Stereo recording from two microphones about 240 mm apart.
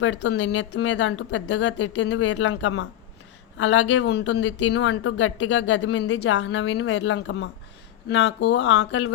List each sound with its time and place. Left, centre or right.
0.0 s speech: left